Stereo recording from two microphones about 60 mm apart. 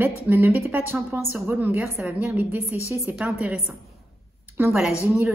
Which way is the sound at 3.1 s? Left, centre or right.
Centre.